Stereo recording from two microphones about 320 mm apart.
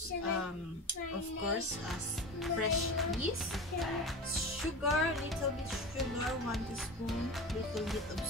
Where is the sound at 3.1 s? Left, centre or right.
Centre.